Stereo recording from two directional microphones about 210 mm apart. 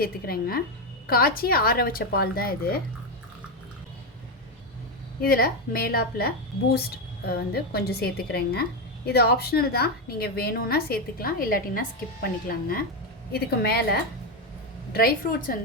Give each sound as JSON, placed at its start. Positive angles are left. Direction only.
{"t": 0.0, "sound": "a woman's voice", "side_deg": 45}
{"t": 5.2, "sound": "a woman's voice", "side_deg": 45}
{"t": 14.9, "sound": "a woman's voice", "side_deg": 45}